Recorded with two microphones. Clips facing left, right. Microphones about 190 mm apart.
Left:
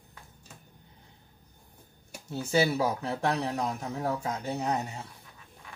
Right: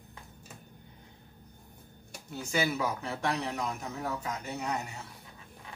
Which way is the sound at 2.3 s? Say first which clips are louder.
Left 5 dB; 35° left (ahead or behind).